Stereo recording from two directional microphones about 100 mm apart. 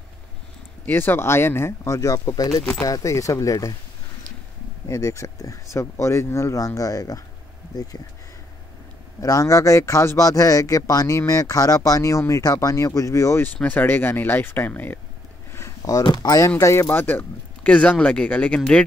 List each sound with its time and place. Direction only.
0.8 s speech: 20° left (ahead or behind)
4.8 s speech: 30° left (ahead or behind)
9.2 s speech: 35° left (ahead or behind)
13.6 s speech: 20° left (ahead or behind)
15.5 s speech: 35° left (ahead or behind); by 18.8 s 15° left (ahead or behind)